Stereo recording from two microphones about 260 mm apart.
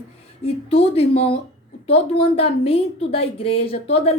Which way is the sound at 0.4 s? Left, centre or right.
Left.